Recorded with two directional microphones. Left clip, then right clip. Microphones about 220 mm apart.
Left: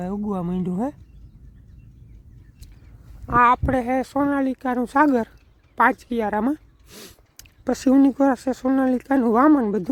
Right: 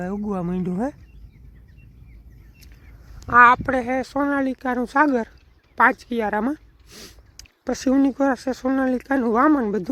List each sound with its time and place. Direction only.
0.0 s speech: 5° left (ahead or behind)
3.2 s speech: 10° left (ahead or behind)
6.9 s speech: 35° left (ahead or behind); by 9.9 s 15° left (ahead or behind)